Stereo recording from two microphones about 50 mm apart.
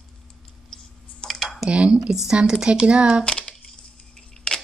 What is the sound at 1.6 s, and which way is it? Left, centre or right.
Speech, right.